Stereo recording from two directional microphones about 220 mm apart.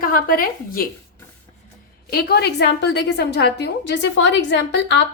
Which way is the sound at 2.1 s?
50° left (ahead or behind).